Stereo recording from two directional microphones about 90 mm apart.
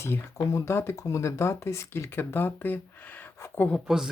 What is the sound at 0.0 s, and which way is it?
Speech, 30° left (ahead or behind).